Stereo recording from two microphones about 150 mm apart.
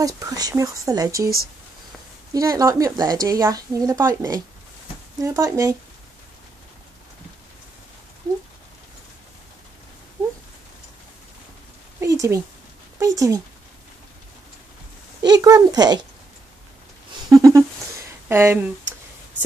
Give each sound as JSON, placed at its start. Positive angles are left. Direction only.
{"t": 0.0, "sound": "a woman's voice", "side_deg": -25}
{"t": 2.3, "sound": "a woman's voice", "side_deg": -25}
{"t": 12.0, "sound": "a sound", "side_deg": -20}
{"t": 13.0, "sound": "a woman's voice", "side_deg": -20}
{"t": 15.2, "sound": "a woman's voice", "side_deg": -25}
{"t": 17.3, "sound": "a woman's voice", "side_deg": -20}